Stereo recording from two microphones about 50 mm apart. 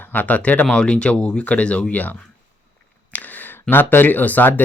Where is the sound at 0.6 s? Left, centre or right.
Centre.